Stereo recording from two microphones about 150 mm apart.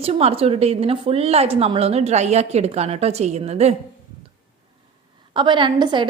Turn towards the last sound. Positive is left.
turn(degrees=-30)  # may be behind; listen again after turning